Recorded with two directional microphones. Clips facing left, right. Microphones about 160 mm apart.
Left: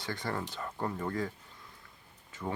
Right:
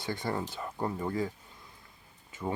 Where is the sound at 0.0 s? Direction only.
15° right (ahead or behind).